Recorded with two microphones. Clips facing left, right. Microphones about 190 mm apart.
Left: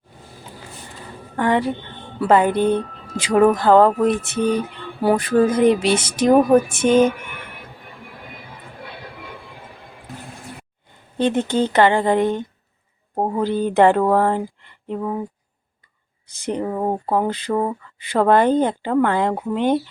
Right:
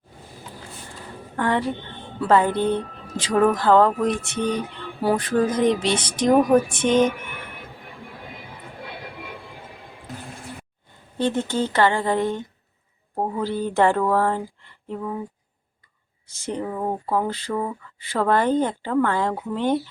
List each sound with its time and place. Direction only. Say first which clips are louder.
1.4 s speech: left 4 dB; 15° left (ahead or behind)
11.2 s speech: left 4 dB; 15° left (ahead or behind)
13.1 s speech: left 4 dB; 40° left (ahead or behind)
13.4 s speech: left 5 dB; 20° left (ahead or behind)
14.1 s a sound: left 4 dB; 20° left (ahead or behind)
16.2 s speech: left 4 dB; 15° left (ahead or behind)
16.6 s speech: left 4 dB; 30° left (ahead or behind)
17.2 s speech: left 3 dB; 15° left (ahead or behind)
17.5 s speech: left 6 dB; 35° left (ahead or behind)
18.0 s speech: left 5 dB; 20° left (ahead or behind)